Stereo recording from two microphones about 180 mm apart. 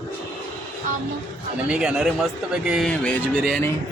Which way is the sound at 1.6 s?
5° right (ahead or behind).